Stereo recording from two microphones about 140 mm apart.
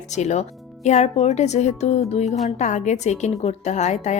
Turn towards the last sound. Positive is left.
turn(degrees=55)  # may be behind; listen again after turning